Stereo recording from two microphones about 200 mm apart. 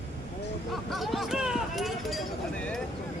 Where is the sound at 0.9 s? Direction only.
Centre (ahead or behind).